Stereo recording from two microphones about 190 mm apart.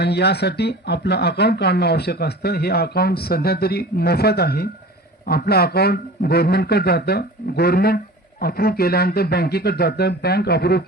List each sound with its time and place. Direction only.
0.0 s speech: 60° left (ahead or behind)